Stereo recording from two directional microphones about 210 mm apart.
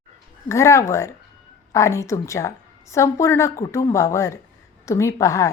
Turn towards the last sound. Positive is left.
turn(degrees=15)  # may be behind; listen again after turning